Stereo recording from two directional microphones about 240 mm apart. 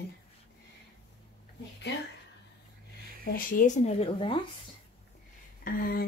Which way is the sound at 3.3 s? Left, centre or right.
Left.